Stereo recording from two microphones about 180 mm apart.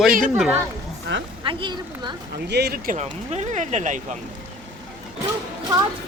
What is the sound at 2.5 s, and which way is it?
Speech, 65° right (ahead or behind).